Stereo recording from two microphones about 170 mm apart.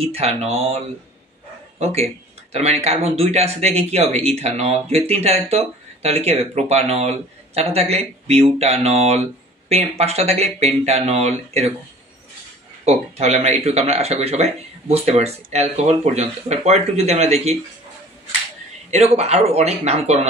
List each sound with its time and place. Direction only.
0.0 s speech: 35° right (ahead or behind)
12.8 s speech: 40° right (ahead or behind)
18.9 s speech: 40° right (ahead or behind)